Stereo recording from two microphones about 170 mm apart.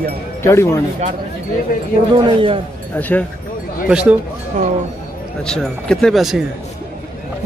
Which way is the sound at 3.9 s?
5° right (ahead or behind).